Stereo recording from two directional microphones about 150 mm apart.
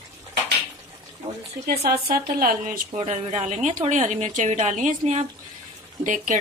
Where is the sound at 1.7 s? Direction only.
90° right; by 2.8 s 75° right (ahead or behind).